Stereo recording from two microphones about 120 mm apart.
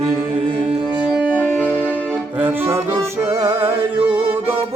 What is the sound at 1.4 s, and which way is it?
Music, 10° left (ahead or behind).